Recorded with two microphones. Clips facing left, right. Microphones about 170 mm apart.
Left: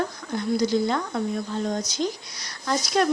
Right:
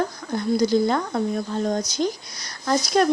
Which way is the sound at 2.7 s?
40° right (ahead or behind).